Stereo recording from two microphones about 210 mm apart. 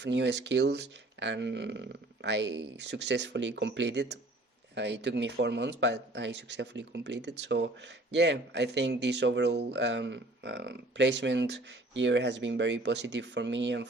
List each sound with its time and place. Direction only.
0.0 s speech: 55° right (ahead or behind)